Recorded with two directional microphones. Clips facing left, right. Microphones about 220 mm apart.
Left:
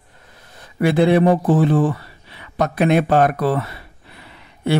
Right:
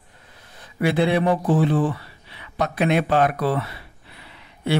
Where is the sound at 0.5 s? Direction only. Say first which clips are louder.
Left 4 dB; 45° left (ahead or behind).